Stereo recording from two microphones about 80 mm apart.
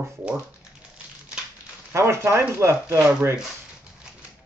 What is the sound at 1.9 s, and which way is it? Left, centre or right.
A man's voice, right.